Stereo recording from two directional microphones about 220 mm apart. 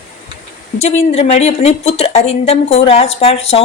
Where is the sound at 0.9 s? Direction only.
30° left (ahead or behind).